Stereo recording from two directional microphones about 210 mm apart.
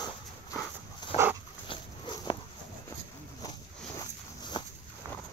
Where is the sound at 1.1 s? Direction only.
30° left (ahead or behind).